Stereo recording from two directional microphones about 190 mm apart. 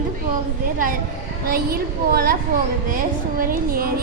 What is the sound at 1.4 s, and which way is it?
A woman's voice, 55° right (ahead or behind).